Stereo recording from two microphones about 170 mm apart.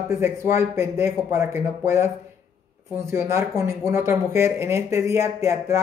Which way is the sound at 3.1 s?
15° right (ahead or behind).